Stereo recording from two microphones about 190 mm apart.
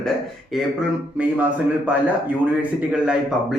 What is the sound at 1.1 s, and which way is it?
A man's voice, 10° right (ahead or behind).